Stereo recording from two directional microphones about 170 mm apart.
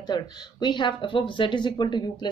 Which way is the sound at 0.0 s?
25° left (ahead or behind).